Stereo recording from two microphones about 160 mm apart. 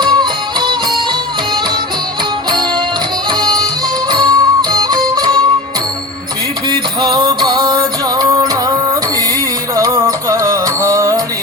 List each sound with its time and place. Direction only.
0.0 s music: 25° right (ahead or behind)
3.4 s music: 25° right (ahead or behind)
6.7 s music: 25° right (ahead or behind)
9.7 s music: 20° right (ahead or behind)